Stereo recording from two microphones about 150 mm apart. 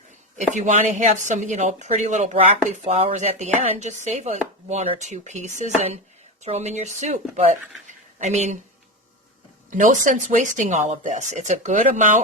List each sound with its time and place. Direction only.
0.3 s speech: 55° right (ahead or behind)
7.9 s a sound: 50° right (ahead or behind)
9.6 s speech: 60° right (ahead or behind)